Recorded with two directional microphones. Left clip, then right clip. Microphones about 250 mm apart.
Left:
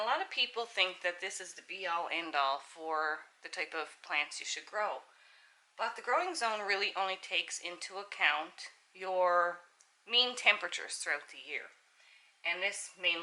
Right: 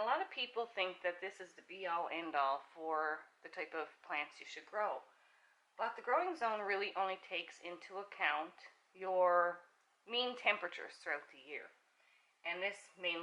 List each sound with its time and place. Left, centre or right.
0.1 s speech: centre
2.6 s speech: right
3.4 s speech: centre
10.1 s speech: centre